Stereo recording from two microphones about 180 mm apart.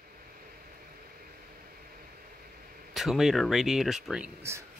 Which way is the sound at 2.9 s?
Centre (ahead or behind).